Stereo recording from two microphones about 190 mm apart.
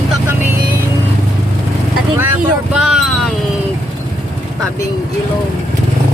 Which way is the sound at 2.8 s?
5° right (ahead or behind).